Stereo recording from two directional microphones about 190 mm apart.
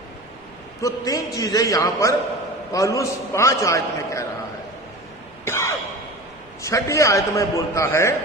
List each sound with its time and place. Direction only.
0.8 s a man's voice: 15° left (ahead or behind)
5.5 s a sound: 15° left (ahead or behind)
6.6 s a man's voice: 15° left (ahead or behind)